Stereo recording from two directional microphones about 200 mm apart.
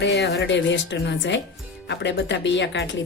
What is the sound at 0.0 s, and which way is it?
A woman's voice, 60° left (ahead or behind).